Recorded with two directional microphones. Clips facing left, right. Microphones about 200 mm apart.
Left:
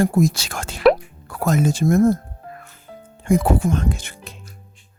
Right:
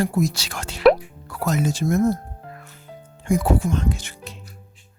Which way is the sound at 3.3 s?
55° left (ahead or behind).